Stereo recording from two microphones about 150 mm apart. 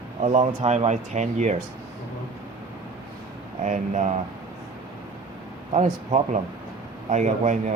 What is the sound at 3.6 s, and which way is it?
Speech, 50° right (ahead or behind).